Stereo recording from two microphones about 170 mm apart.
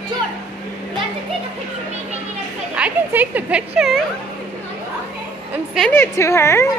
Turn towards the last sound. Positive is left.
turn(degrees=15)  # may be behind; listen again after turning